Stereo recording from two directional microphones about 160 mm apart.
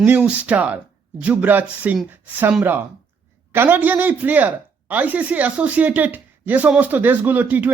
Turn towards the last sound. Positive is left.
turn(degrees=-10)  # may be behind; listen again after turning